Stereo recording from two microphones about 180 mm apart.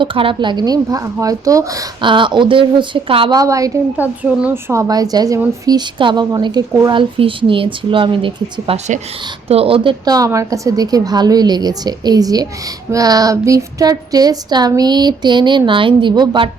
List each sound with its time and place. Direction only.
0.0 s a woman's voice: 30° right (ahead or behind)